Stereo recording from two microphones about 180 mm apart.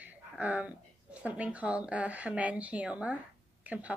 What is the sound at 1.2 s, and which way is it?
A woman's voice, 5° right (ahead or behind).